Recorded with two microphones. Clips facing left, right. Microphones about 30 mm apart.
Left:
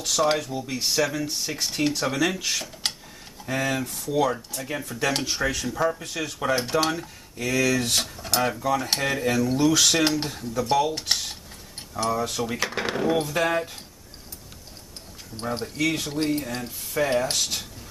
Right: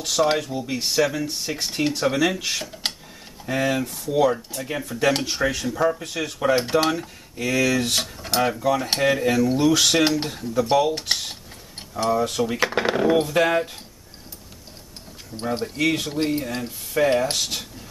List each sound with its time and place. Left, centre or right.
0.0 s speech: centre
15.3 s speech: centre